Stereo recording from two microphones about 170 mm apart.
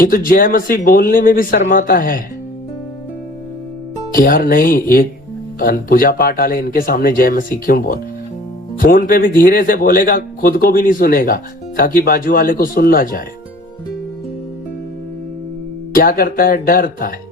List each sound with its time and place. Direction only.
0.0 s speech: 55° left (ahead or behind)
4.1 s speech: 55° left (ahead or behind)
15.9 s speech: 60° left (ahead or behind)